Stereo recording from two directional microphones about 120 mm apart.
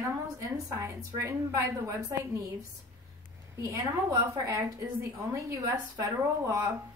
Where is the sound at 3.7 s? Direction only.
25° right (ahead or behind).